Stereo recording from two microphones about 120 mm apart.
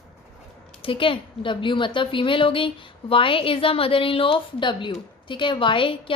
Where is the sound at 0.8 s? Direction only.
45° left (ahead or behind).